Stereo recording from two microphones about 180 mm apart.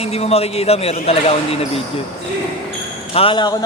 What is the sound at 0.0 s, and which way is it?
A man's voice, 35° left (ahead or behind).